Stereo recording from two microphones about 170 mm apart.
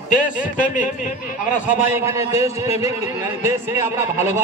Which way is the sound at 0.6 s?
50° left (ahead or behind).